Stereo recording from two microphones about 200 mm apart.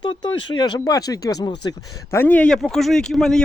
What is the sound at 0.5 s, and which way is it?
Speech, 20° left (ahead or behind).